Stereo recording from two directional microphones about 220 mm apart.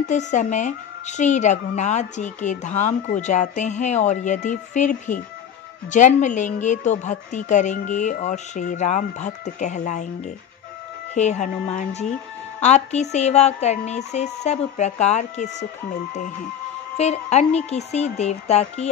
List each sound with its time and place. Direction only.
0.1 s a woman's voice: 35° left (ahead or behind)
16.9 s speech: 30° left (ahead or behind)